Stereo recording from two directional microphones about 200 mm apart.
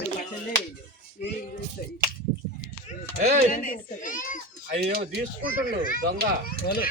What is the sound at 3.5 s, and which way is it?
Speech, 45° left (ahead or behind).